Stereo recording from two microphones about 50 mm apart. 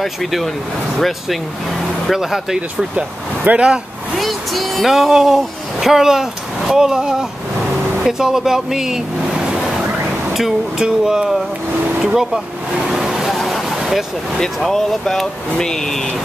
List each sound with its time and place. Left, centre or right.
0.0 s speech: centre
2.1 s speech: centre
3.4 s speech: right
4.2 s speech: centre
12.8 s vehicle: centre
13.4 s a sound: centre
14.6 s speech: centre